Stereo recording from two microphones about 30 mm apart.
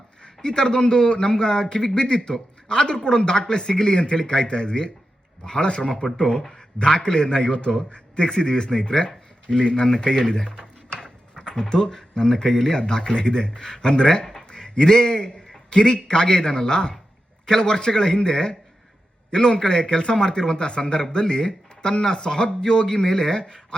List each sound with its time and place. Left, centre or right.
0.2 s a man's voice: left
2.3 s a sound: left
2.8 s a man's voice: left; by 12.7 s centre
12.7 s a man's voice: left